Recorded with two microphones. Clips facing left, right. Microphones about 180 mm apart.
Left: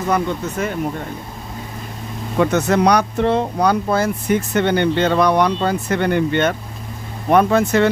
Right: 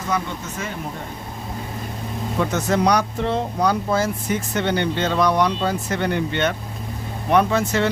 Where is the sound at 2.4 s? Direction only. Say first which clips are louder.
Left 5 dB; 65° left (ahead or behind).